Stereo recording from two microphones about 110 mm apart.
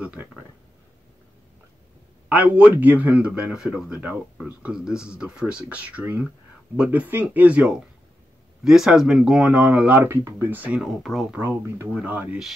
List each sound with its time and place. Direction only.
0.0 s a man's voice: 10° right (ahead or behind)
2.2 s a man's voice: 10° right (ahead or behind)
11.3 s a man's voice: 20° right (ahead or behind)